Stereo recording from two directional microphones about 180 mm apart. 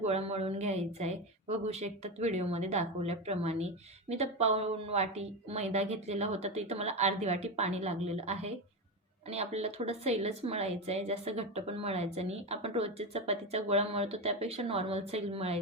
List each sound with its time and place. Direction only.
0.0 s a woman's voice: 35° right (ahead or behind)